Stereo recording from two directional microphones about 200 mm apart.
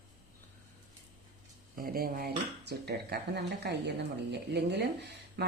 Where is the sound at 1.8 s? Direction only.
45° right (ahead or behind).